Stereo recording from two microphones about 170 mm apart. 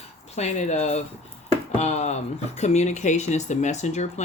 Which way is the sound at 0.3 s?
40° left (ahead or behind).